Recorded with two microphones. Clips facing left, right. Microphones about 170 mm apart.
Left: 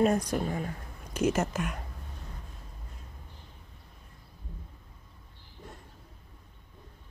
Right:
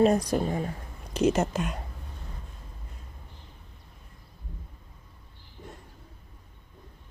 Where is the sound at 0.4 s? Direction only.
25° right (ahead or behind).